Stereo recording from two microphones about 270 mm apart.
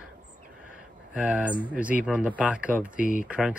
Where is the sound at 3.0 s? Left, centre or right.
Left.